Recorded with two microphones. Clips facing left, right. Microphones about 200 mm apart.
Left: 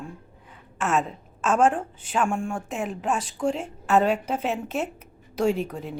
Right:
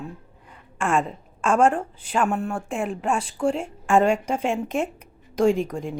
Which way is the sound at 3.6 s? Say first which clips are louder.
Right 2 dB; 5° left (ahead or behind).